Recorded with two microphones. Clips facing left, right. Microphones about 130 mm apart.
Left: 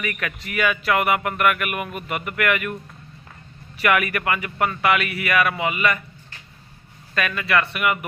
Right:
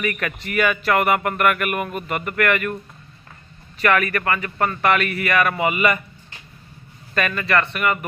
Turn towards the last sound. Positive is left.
turn(degrees=10)  # may be behind; listen again after turning